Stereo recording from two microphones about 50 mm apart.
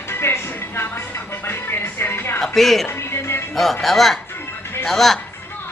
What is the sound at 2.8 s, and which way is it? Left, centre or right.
Music, left.